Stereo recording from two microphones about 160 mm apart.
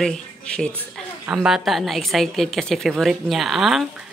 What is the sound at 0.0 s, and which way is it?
A woman's voice, 5° left (ahead or behind).